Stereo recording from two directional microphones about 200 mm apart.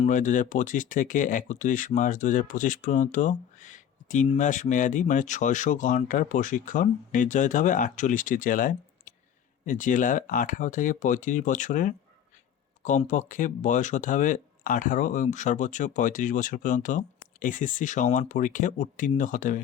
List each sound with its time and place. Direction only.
0.0 s speech: 40° left (ahead or behind)